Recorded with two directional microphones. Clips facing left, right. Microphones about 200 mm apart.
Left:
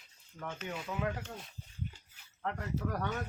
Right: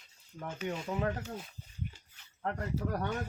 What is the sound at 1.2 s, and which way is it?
Speech, 5° right (ahead or behind).